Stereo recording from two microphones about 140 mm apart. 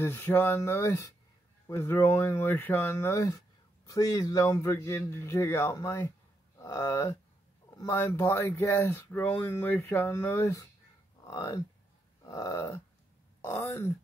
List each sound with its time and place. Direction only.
0.0 s speech: 15° left (ahead or behind)